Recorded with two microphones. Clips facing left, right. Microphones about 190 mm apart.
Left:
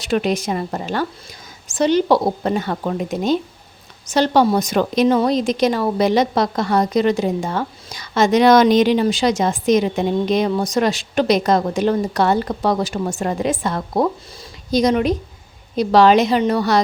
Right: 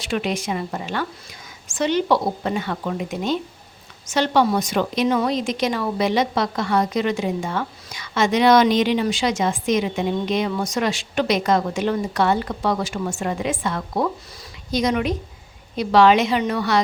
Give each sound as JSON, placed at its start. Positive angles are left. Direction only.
{"t": 0.0, "sound": "a woman's voice", "side_deg": 40}